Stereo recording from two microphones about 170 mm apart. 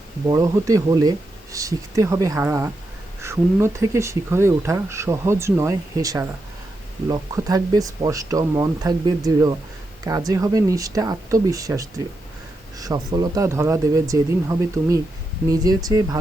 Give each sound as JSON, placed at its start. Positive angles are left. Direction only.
{"t": 0.3, "sound": "speech", "side_deg": -20}